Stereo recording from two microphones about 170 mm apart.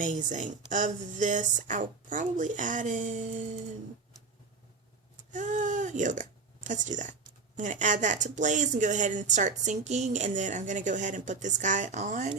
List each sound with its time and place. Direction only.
0.0 s speech: 50° right (ahead or behind)
5.3 s speech: 45° right (ahead or behind)